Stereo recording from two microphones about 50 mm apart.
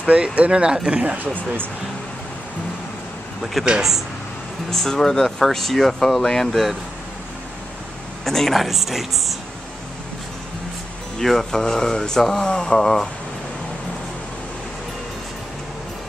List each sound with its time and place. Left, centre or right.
0.0 s speech: right
1.1 s speech: right
3.6 s speech: centre
8.3 s speech: centre
8.6 s speech: centre
11.1 s speech: centre